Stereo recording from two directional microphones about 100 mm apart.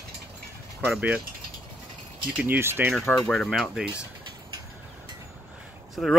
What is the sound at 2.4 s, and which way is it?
Speech, 20° right (ahead or behind).